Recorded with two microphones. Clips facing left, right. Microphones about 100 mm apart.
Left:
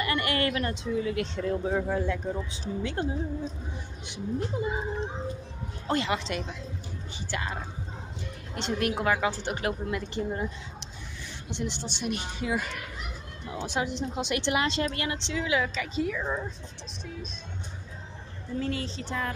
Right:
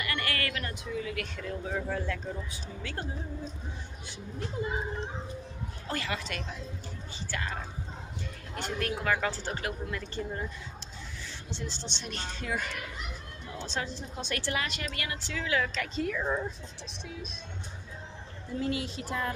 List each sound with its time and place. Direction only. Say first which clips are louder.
0.0 s a woman's voice: left 6 dB; 25° left (ahead or behind)
1.8 s a woman's voice: left 5 dB; 20° left (ahead or behind)
5.9 s a woman's voice: left 7 dB; 20° left (ahead or behind)
8.5 s a woman's voice: left 5 dB; 20° left (ahead or behind); by 16.5 s 5° right (ahead or behind)
18.6 s speech: even; 10° right (ahead or behind)